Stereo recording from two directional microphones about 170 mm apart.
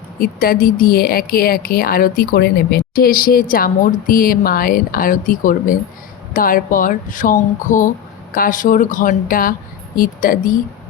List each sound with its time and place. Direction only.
0.2 s speech: 60° left (ahead or behind)